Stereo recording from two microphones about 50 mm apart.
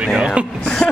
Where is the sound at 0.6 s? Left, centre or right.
Left.